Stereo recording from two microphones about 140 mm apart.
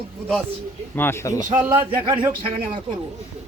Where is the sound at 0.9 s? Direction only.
15° left (ahead or behind).